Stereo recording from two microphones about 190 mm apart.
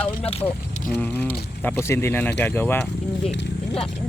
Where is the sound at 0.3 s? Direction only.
30° left (ahead or behind).